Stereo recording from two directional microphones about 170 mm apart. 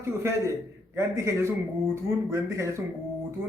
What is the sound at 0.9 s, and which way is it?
A man's voice, 15° right (ahead or behind).